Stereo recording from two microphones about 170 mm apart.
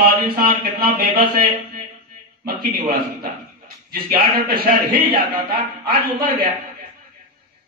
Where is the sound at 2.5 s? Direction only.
60° right (ahead or behind).